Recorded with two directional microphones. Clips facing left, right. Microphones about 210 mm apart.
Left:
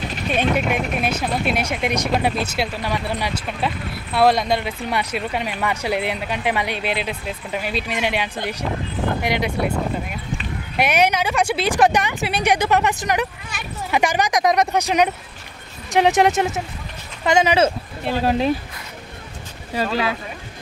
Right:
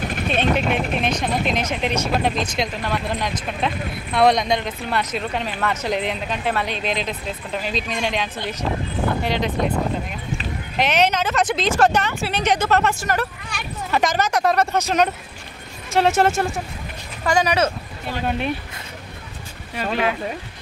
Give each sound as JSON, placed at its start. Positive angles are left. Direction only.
{"t": 0.4, "sound": "speech", "side_deg": 10}
{"t": 10.8, "sound": "speech", "side_deg": 10}
{"t": 19.7, "sound": "speech", "side_deg": 35}